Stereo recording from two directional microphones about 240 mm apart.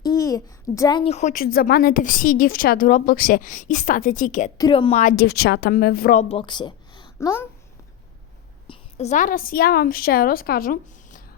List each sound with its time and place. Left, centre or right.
0.0 s a child's voice: centre; by 4.5 s left
4.5 s a child's voice: centre; by 6.2 s left
6.2 s a woman's voice: left
8.6 s a woman's voice: left